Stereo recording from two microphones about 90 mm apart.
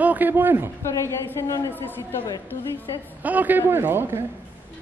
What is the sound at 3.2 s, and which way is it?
Speech, 20° right (ahead or behind).